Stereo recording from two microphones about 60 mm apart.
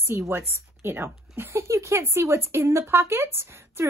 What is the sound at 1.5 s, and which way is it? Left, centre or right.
Speech, right.